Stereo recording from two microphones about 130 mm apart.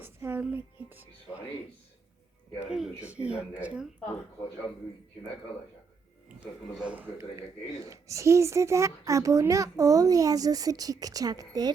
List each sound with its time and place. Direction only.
0.0 s music: 15° right (ahead or behind)
0.5 s speech: 15° right (ahead or behind)
2.6 s speech: 5° right (ahead or behind)
6.2 s speech: 10° right (ahead or behind)
7.9 s a child's voice: 25° right (ahead or behind)